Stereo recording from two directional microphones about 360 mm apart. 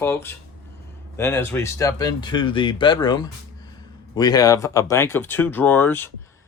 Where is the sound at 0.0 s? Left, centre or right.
Centre.